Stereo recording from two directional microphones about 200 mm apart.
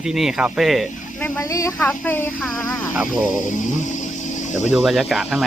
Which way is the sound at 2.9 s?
5° right (ahead or behind).